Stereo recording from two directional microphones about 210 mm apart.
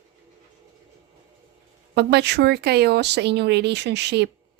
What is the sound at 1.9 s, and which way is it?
Speech, 50° right (ahead or behind).